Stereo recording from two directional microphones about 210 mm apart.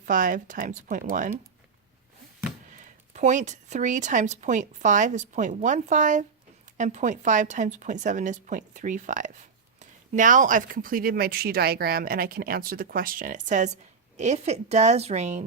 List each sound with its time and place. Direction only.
0.0 s a woman's voice: 40° right (ahead or behind)
3.1 s a woman's voice: 35° right (ahead or behind)